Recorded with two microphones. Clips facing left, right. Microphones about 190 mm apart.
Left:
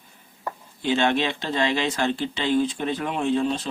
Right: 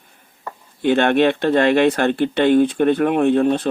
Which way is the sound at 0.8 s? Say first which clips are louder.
Right 7 dB; 60° right (ahead or behind).